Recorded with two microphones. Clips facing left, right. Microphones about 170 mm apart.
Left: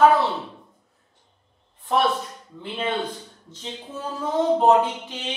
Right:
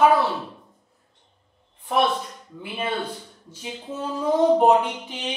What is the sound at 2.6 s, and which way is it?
Speech, 10° right (ahead or behind).